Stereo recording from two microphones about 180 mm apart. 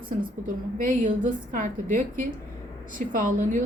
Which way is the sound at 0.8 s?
45° right (ahead or behind).